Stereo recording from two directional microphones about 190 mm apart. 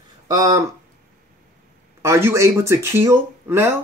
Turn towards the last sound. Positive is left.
turn(degrees=-15)  # may be behind; listen again after turning